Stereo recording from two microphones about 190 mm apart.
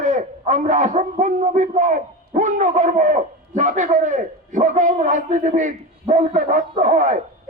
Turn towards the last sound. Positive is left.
turn(degrees=-40)  # may be behind; listen again after turning